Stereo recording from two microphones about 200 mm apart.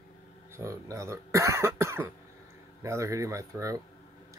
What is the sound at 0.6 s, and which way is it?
Speech, 15° right (ahead or behind).